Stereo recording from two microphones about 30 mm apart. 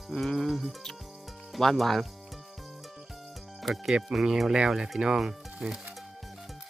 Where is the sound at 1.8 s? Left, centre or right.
Centre.